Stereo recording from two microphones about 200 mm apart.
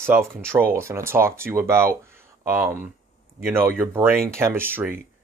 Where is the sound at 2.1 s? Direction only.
10° right (ahead or behind).